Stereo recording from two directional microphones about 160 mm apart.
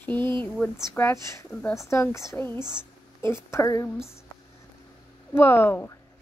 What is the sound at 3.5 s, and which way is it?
Speech, 20° left (ahead or behind).